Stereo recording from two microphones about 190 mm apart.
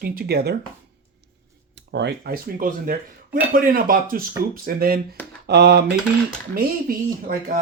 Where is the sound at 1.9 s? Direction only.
65° right (ahead or behind).